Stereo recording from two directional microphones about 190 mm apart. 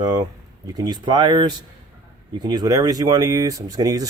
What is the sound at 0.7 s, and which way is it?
Speech, 20° right (ahead or behind).